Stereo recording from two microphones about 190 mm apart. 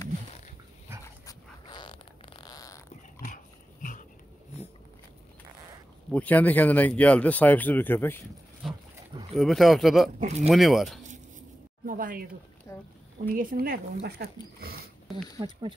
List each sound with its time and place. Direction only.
1.0 s dog: 20° left (ahead or behind)
6.1 s speech: 10° left (ahead or behind)
8.6 s roaring cats: centre (ahead or behind)
9.3 s speech: centre (ahead or behind)
10.2 s speech: 35° right (ahead or behind)
10.5 s speech: centre (ahead or behind)
11.8 s speech: 45° right (ahead or behind)
12.7 s boat: 10° left (ahead or behind)
13.3 s speech: 50° right (ahead or behind)
14.0 s wild animals: 55° right (ahead or behind)
15.3 s speech: 25° right (ahead or behind)